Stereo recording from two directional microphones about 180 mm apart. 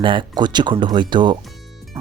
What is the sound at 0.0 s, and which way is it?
Speech, 25° right (ahead or behind).